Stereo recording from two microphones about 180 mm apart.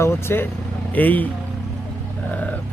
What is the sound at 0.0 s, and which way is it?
Speech, 15° left (ahead or behind).